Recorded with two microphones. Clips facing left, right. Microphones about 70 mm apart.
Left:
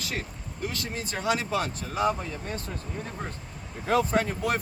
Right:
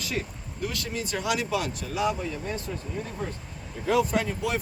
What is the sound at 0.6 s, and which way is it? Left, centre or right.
Speech, left.